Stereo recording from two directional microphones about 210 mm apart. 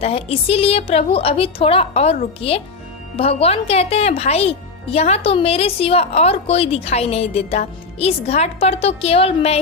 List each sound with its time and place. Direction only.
0.0 s speech: 30° left (ahead or behind)